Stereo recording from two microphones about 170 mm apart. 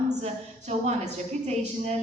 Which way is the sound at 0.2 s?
40° right (ahead or behind).